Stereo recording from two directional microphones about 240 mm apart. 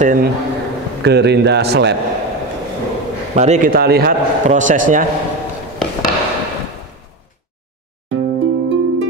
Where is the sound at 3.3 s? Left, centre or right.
Right.